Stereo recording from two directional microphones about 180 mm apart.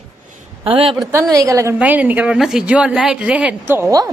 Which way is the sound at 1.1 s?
15° right (ahead or behind).